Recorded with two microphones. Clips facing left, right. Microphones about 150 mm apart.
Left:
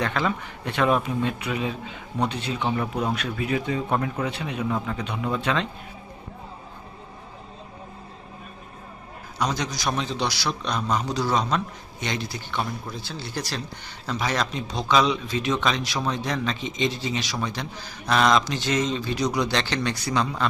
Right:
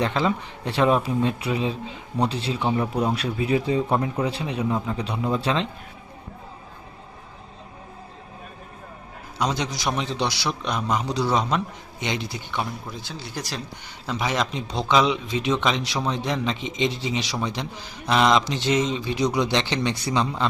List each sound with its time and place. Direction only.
0.0 s a man's voice: 25° right (ahead or behind)
2.7 s a man's voice: 10° right (ahead or behind)
3.2 s a man's voice: 30° right (ahead or behind)
9.4 s a man's voice: 25° right (ahead or behind)